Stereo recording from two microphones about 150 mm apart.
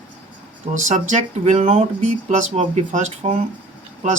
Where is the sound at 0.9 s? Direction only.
55° right (ahead or behind).